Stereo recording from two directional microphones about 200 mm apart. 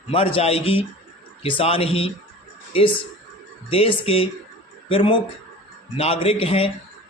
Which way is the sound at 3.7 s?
30° left (ahead or behind).